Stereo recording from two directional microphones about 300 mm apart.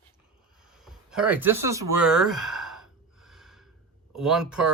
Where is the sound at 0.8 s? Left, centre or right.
Centre.